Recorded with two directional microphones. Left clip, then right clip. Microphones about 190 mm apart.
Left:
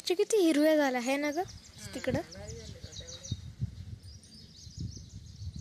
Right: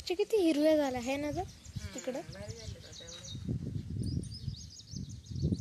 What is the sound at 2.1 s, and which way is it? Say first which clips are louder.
Speech: left 5 dB; 20° left (ahead or behind).